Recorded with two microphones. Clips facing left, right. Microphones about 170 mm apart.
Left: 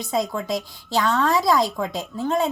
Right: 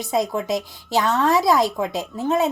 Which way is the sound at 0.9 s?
20° right (ahead or behind).